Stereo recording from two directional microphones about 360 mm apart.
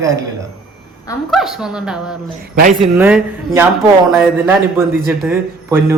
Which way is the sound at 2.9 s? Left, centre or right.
Centre.